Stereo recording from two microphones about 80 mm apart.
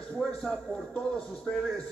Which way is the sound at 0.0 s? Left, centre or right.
Centre.